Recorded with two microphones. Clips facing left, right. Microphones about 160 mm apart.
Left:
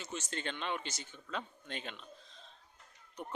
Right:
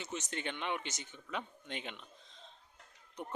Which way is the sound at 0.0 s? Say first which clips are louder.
Even; 20° right (ahead or behind).